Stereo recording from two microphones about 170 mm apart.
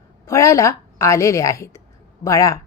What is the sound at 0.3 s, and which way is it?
A woman's voice, 15° left (ahead or behind).